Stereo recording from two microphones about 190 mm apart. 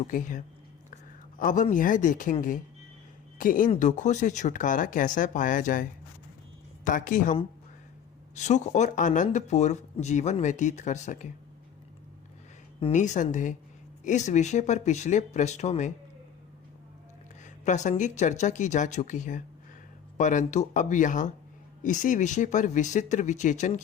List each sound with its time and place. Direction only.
0.0 s speech: 45° left (ahead or behind)
3.3 s speech: 45° left (ahead or behind)
8.4 s speech: 40° left (ahead or behind)
12.8 s speech: 40° left (ahead or behind)
17.4 s speech: 40° left (ahead or behind)